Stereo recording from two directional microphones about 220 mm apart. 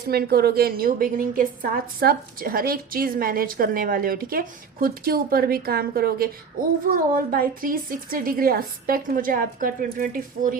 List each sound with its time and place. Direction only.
0.1 s a woman's voice: 45° right (ahead or behind)